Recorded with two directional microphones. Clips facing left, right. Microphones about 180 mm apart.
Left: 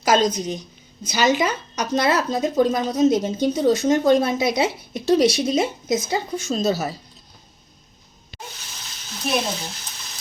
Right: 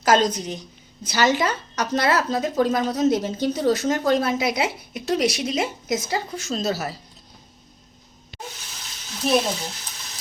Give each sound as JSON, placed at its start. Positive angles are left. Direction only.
{"t": 0.0, "sound": "a woman's voice", "side_deg": 15}